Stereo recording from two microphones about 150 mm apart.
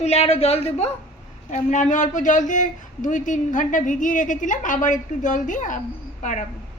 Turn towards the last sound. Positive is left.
turn(degrees=55)  # may be behind; listen again after turning